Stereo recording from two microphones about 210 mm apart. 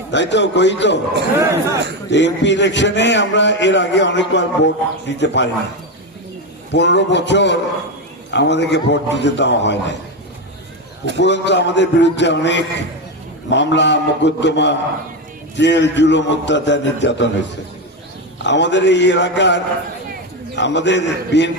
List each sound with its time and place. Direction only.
0.1 s a man's voice: 55° left (ahead or behind)
1.4 s speech: 15° right (ahead or behind)
2.0 s a man's voice: 55° left (ahead or behind)
6.7 s a man's voice: 55° left (ahead or behind)
11.2 s a man's voice: 55° left (ahead or behind)
18.4 s a man's voice: 55° left (ahead or behind)